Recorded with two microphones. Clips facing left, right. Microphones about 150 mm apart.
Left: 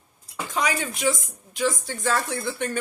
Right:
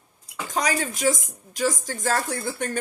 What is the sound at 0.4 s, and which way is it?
Speech, 40° right (ahead or behind).